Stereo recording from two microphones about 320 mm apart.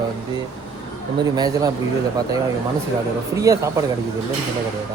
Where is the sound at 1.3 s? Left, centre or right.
Centre.